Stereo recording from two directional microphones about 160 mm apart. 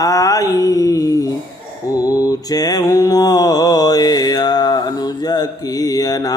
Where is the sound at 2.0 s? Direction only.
20° left (ahead or behind).